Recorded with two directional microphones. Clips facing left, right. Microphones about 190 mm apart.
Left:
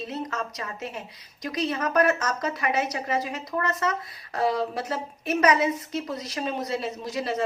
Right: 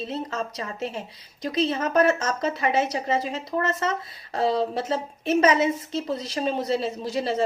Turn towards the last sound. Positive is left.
turn(degrees=-30)  # may be behind; listen again after turning